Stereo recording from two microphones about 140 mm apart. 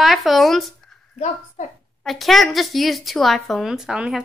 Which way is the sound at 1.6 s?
60° left (ahead or behind).